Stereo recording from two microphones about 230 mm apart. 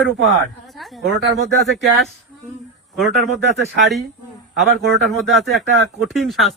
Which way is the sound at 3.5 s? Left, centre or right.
Right.